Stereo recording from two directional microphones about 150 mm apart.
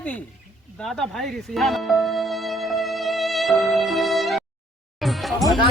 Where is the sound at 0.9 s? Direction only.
5° left (ahead or behind).